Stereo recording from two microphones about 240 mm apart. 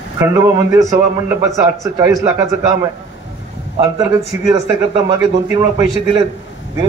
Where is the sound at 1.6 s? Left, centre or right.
Centre.